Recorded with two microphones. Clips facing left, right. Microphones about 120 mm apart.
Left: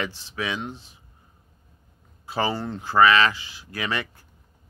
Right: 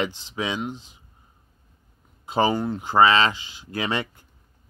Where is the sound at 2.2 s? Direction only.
20° right (ahead or behind).